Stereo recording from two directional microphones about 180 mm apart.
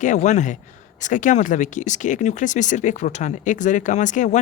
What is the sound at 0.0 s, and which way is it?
Speech, 45° left (ahead or behind).